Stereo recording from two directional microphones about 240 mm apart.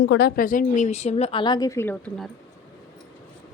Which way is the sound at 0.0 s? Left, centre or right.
Left.